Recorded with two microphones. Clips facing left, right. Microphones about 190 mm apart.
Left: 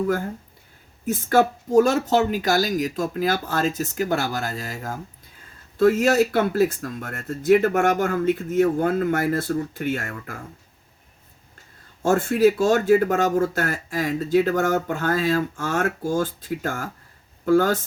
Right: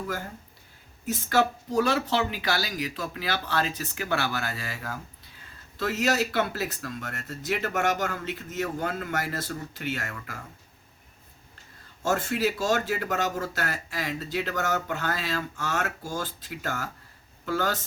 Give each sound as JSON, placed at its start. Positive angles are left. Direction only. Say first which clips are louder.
{"t": 1.0, "sound": "speech", "louder": "left 6 dB", "side_deg": 50}
{"t": 12.0, "sound": "speech", "louder": "left 9 dB", "side_deg": 50}